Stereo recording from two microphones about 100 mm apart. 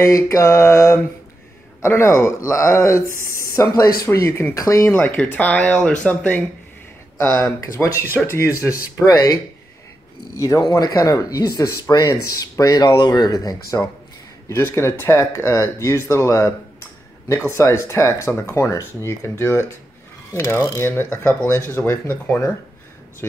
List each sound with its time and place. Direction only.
0.0 s speech: 30° left (ahead or behind)
4.9 s speech: 15° left (ahead or behind)
7.2 s speech: 30° left (ahead or behind)
14.5 s speech: 25° left (ahead or behind)
17.6 s speech: 30° left (ahead or behind)
20.2 s a sound: 25° left (ahead or behind)
20.7 s speech: 25° left (ahead or behind)